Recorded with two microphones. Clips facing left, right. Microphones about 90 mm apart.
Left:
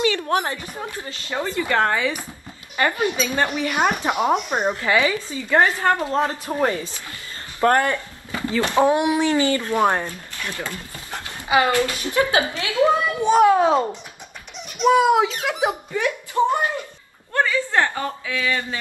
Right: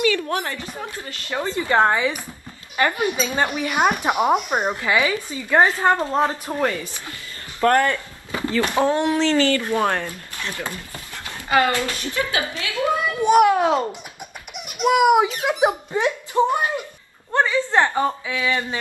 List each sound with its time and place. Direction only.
0.0 s a sound: 25° left (ahead or behind)
0.9 s a woman's voice: 20° left (ahead or behind)
1.4 s a child's voice: 20° right (ahead or behind)
6.5 s a woman's voice: 20° left (ahead or behind)
10.3 s speech: 20° right (ahead or behind)
11.4 s a woman's voice: 10° left (ahead or behind)
14.8 s a child's voice: 15° right (ahead or behind)